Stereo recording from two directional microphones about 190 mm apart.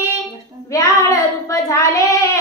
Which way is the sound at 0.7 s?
15° left (ahead or behind).